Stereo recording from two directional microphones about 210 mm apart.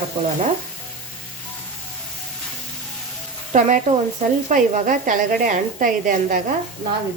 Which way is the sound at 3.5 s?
35° right (ahead or behind).